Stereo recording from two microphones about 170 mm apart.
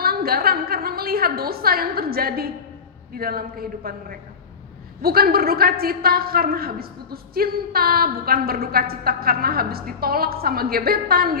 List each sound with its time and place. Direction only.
0.0 s a woman's voice: 65° right (ahead or behind)